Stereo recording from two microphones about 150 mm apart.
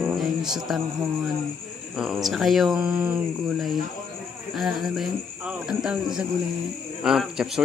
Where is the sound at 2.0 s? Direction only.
Centre (ahead or behind).